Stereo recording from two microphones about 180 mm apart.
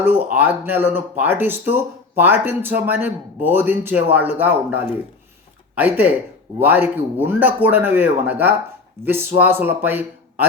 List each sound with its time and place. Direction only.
0.0 s speech: 10° right (ahead or behind)